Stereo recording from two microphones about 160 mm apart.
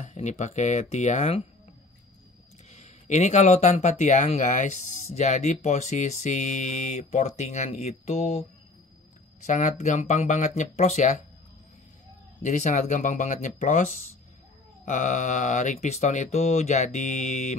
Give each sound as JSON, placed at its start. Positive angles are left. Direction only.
{"t": 0.0, "sound": "speech", "side_deg": 45}
{"t": 2.7, "sound": "speech", "side_deg": 45}
{"t": 9.5, "sound": "speech", "side_deg": 45}
{"t": 12.4, "sound": "speech", "side_deg": 50}
{"t": 14.9, "sound": "speech", "side_deg": 50}